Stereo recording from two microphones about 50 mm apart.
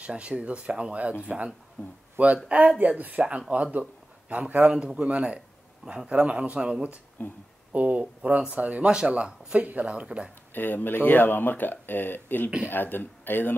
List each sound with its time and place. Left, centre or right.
0.0 s speech: right
1.8 s speech: left
2.1 s speech: right
4.7 s speech: centre
7.2 s speech: left
7.7 s speech: right
10.5 s speech: left